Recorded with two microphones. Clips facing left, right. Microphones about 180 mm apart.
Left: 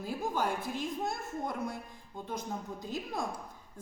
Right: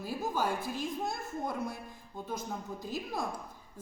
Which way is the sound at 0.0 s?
5° right (ahead or behind).